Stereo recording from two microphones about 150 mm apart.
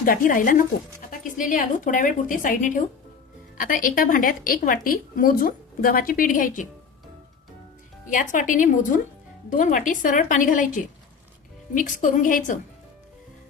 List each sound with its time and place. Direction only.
0.0 s a woman's voice: 65° left (ahead or behind)
8.0 s a woman's voice: 60° left (ahead or behind)